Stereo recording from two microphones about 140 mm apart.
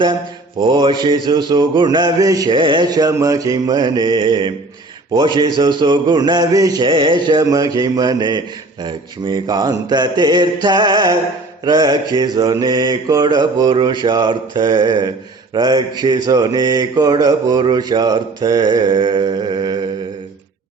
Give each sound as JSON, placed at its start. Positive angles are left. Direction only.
{"t": 0.6, "sound": "mantra", "side_deg": -30}